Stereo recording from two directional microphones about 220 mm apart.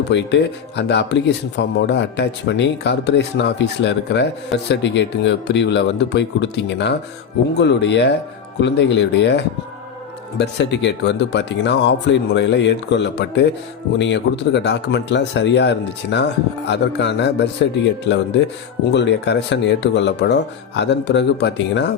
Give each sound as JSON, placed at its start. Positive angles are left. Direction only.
{"t": 0.1, "sound": "speech", "side_deg": 50}